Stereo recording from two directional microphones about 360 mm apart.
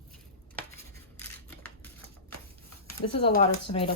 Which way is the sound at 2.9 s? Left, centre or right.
Centre.